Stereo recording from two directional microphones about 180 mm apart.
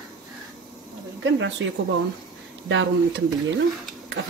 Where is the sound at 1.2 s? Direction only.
90° right.